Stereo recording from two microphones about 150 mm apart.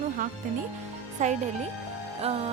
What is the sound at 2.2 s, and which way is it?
Music, 40° right (ahead or behind).